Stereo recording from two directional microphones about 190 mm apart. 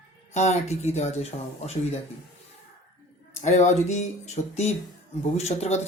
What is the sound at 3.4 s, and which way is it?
Speech, 40° left (ahead or behind).